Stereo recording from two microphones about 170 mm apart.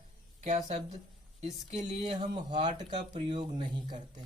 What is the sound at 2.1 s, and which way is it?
Speech, 25° right (ahead or behind).